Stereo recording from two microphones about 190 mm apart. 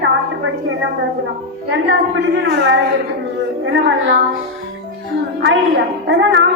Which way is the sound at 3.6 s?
75° right (ahead or behind).